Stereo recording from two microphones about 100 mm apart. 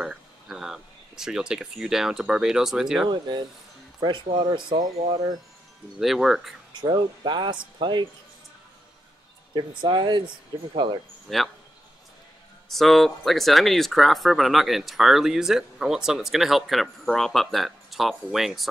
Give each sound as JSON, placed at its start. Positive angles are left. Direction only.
{"t": 0.0, "sound": "speech", "side_deg": -5}
{"t": 3.1, "sound": "speech", "side_deg": -50}
{"t": 5.9, "sound": "speech", "side_deg": 0}
{"t": 6.7, "sound": "speech", "side_deg": -50}
{"t": 9.5, "sound": "speech", "side_deg": -50}
{"t": 11.2, "sound": "speech", "side_deg": 0}
{"t": 12.6, "sound": "speech", "side_deg": 0}